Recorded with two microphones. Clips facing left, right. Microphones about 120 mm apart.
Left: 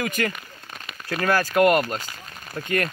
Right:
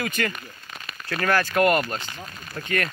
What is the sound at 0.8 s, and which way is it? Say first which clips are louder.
Speech: left 1 dB; 15° left (ahead or behind).